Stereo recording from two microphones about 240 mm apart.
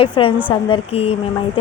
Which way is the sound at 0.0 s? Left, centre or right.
Left.